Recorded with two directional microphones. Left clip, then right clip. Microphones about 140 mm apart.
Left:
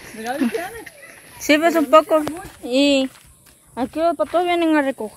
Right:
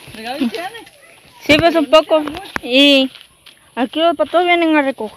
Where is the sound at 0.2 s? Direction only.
Centre (ahead or behind).